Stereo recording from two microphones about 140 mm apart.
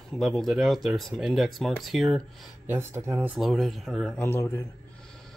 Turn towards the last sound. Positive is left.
turn(degrees=15)  # may be behind; listen again after turning